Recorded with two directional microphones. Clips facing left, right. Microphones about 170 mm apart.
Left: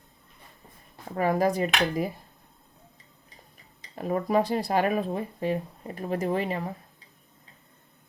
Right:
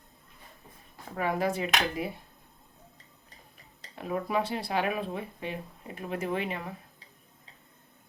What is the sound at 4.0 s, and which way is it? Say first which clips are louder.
Speech: left 5 dB; 40° left (ahead or behind).